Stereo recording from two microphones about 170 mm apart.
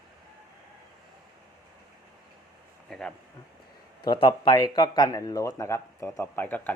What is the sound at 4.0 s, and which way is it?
A man's voice, 25° left (ahead or behind).